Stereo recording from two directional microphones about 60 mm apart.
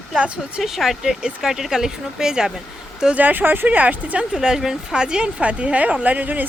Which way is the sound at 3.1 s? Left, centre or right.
Right.